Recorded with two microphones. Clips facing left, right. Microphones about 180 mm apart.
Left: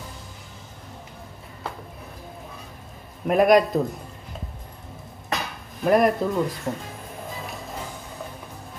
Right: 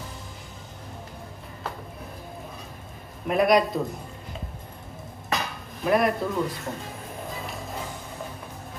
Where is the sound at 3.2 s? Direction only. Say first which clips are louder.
Left 4 dB; 50° left (ahead or behind).